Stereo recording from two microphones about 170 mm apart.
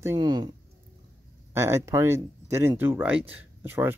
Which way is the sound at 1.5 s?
15° right (ahead or behind).